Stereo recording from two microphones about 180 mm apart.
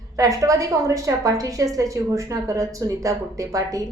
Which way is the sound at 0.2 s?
20° right (ahead or behind).